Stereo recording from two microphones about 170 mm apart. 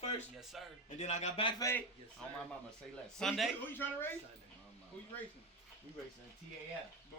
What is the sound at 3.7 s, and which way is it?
Speech, 10° left (ahead or behind).